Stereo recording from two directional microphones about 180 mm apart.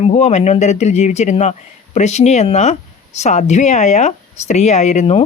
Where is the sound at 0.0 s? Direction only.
40° left (ahead or behind).